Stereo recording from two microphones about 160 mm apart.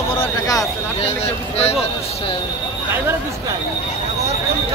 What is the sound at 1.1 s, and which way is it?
Speech, 40° left (ahead or behind).